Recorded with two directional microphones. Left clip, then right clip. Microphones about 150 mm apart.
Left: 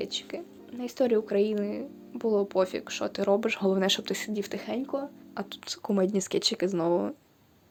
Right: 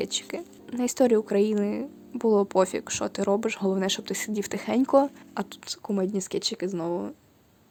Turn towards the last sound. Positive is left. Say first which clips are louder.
# left 3 dB
turn(degrees=-15)  # may be behind; listen again after turning